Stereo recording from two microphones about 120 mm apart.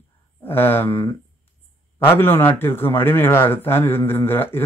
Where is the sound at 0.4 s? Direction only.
15° left (ahead or behind).